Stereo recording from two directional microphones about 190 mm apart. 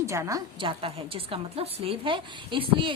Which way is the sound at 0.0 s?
15° right (ahead or behind).